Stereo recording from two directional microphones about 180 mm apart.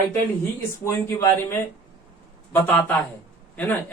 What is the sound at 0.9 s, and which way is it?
Speech, 15° left (ahead or behind).